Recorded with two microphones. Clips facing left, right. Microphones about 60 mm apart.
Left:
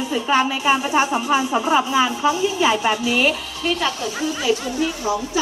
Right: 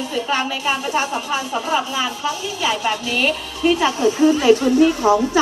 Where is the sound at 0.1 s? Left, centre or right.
Centre.